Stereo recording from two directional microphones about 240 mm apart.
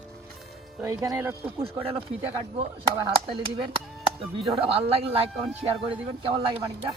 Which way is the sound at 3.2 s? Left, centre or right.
Right.